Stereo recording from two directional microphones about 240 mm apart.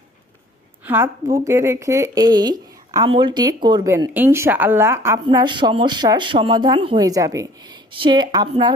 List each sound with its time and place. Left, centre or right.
0.9 s speech: centre